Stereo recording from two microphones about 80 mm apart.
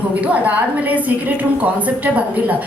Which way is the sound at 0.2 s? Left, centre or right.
Centre.